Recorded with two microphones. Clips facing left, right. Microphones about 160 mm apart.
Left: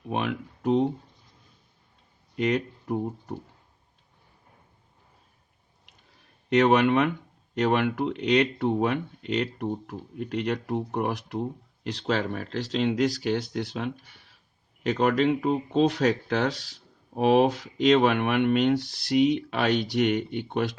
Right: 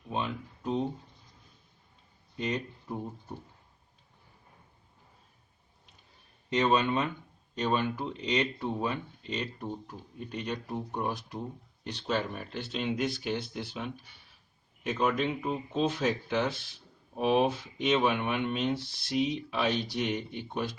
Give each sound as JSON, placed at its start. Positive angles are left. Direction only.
{"t": 0.1, "sound": "speech", "side_deg": 80}
{"t": 2.3, "sound": "speech", "side_deg": 80}
{"t": 6.5, "sound": "speech", "side_deg": 80}